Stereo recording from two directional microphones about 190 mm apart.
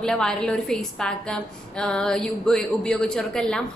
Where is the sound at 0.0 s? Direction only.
5° left (ahead or behind).